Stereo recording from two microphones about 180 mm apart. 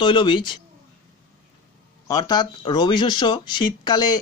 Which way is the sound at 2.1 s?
20° left (ahead or behind).